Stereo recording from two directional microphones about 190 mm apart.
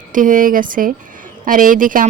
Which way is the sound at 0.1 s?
45° right (ahead or behind).